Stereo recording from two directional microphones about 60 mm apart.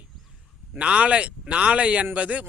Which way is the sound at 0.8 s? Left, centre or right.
Centre.